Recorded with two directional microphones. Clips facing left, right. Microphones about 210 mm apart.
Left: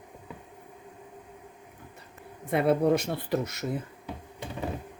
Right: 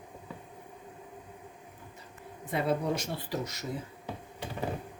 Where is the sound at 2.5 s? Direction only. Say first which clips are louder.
Left 7 dB; 60° left (ahead or behind).